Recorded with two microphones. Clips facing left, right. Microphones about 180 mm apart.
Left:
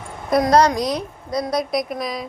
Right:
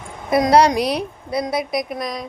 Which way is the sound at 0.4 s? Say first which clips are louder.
Right 2 dB; 15° right (ahead or behind).